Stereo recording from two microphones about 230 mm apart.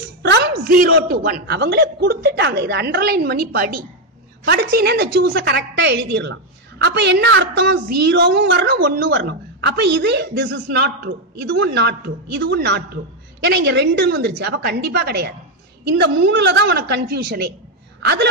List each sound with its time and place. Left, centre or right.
0.2 s a woman's voice: right